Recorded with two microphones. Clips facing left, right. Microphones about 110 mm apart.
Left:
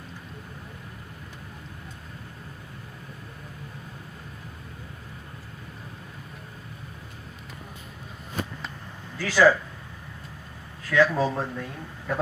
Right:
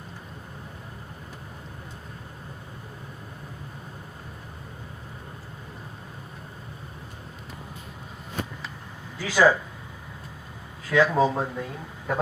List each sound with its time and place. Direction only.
9.1 s speech: 15° right (ahead or behind)
10.8 s speech: 15° right (ahead or behind)